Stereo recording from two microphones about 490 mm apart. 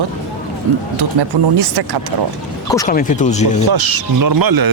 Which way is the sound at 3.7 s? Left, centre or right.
Right.